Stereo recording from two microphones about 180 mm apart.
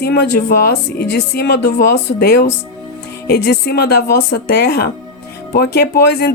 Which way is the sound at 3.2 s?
60° left (ahead or behind).